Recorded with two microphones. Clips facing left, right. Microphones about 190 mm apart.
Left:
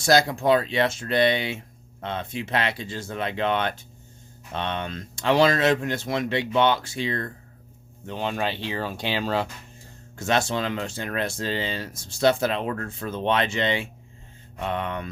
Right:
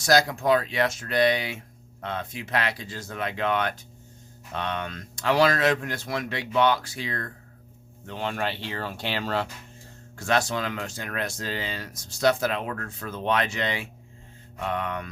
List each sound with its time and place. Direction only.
0.0 s speech: 25° left (ahead or behind)